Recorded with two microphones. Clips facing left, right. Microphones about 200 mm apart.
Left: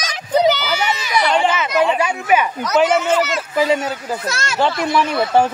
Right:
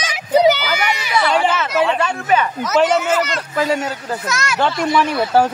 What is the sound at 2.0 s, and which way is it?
Speech, 10° left (ahead or behind).